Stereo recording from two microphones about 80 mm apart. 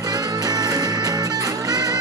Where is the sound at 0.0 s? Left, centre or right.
Right.